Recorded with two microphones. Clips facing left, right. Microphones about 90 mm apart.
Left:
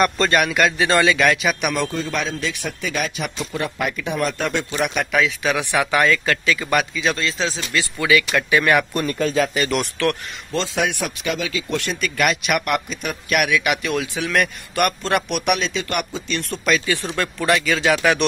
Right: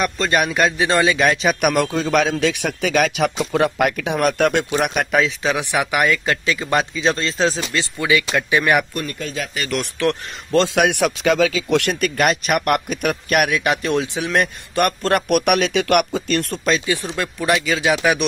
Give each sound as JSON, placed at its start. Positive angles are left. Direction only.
{"t": 0.3, "sound": "speech", "side_deg": -20}
{"t": 1.6, "sound": "a man's voice", "side_deg": -55}
{"t": 3.5, "sound": "a man's voice", "side_deg": -70}
{"t": 5.2, "sound": "speech", "side_deg": -25}
{"t": 7.7, "sound": "speech", "side_deg": -20}
{"t": 8.9, "sound": "speech", "side_deg": 40}
{"t": 10.0, "sound": "speech", "side_deg": -20}
{"t": 10.5, "sound": "speech", "side_deg": -65}
{"t": 12.2, "sound": "a man's voice", "side_deg": -40}
{"t": 15.0, "sound": "speech", "side_deg": -45}
{"t": 16.6, "sound": "speech", "side_deg": -25}